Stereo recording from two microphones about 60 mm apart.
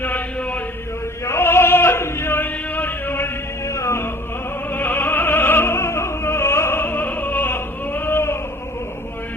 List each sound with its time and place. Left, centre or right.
0.0 s chant: left
1.2 s a sound: left
3.7 s music: left
4.7 s opera: left